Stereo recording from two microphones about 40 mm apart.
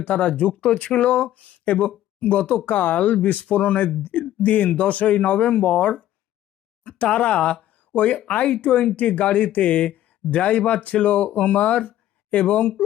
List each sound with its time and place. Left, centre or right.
0.0 s speech: left
0.6 s speech: left
4.4 s speech: left
11.9 s a sound: left